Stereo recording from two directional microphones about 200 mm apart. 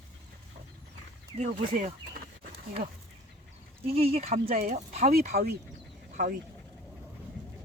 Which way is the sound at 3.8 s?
30° right (ahead or behind).